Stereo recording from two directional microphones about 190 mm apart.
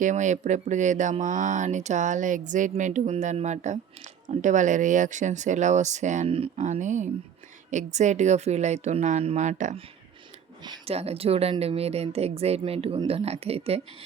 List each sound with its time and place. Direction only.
0.0 s speech: 40° right (ahead or behind)
10.6 s speech: 25° right (ahead or behind)